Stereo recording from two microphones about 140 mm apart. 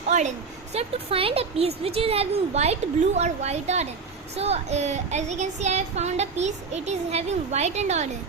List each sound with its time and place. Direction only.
0.1 s a woman's voice: 55° right (ahead or behind)